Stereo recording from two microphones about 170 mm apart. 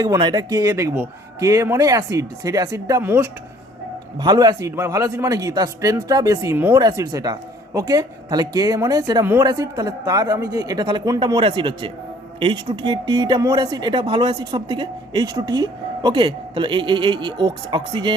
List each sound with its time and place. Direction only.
0.0 s speech: 25° right (ahead or behind)
4.2 s speech: 25° right (ahead or behind)